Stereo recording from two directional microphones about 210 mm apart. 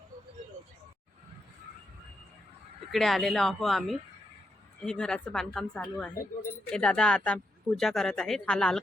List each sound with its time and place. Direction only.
2.9 s speech: centre (ahead or behind)